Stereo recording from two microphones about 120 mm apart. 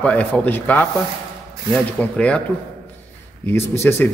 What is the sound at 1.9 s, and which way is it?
Speech, 10° left (ahead or behind).